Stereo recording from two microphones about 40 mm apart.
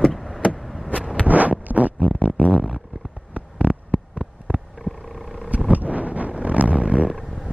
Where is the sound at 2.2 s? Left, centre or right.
Right.